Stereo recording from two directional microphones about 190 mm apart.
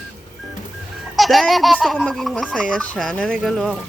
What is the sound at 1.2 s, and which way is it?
Speech, centre (ahead or behind).